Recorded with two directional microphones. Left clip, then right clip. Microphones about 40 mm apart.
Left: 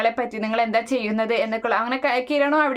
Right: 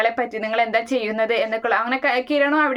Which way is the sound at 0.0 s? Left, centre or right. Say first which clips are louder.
Right 2 dB; left.